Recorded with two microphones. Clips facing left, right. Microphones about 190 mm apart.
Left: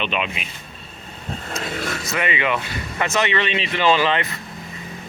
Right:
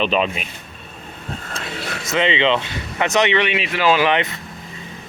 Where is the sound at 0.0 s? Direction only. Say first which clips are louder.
Right 6 dB; 35° right (ahead or behind).